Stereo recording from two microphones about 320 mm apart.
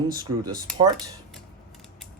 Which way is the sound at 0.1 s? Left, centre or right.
Centre.